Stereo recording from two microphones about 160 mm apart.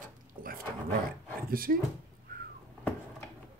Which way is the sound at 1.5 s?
65° right (ahead or behind).